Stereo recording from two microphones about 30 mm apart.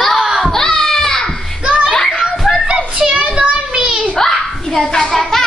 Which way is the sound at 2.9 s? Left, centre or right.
Right.